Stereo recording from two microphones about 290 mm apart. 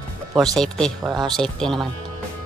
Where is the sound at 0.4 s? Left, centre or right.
Centre.